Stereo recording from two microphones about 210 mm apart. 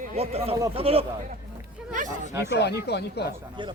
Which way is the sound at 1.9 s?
40° right (ahead or behind).